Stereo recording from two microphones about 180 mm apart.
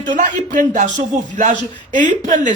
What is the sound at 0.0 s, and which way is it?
Speech, 45° right (ahead or behind).